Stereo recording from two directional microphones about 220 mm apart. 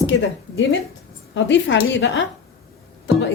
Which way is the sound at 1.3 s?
55° left (ahead or behind).